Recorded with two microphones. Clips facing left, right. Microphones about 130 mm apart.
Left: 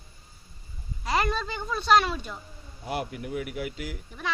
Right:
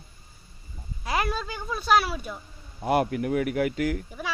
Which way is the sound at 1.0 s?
5° right (ahead or behind).